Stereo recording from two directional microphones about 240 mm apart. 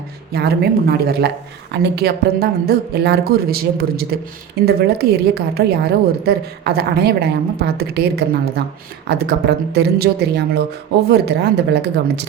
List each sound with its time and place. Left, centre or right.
0.3 s a woman's voice: right